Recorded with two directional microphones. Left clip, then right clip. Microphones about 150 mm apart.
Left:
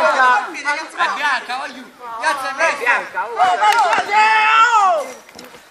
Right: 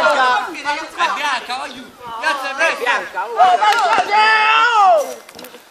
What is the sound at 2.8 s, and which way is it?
Speech, 40° right (ahead or behind).